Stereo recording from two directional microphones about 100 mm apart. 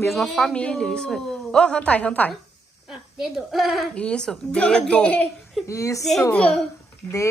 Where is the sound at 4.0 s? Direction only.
10° left (ahead or behind).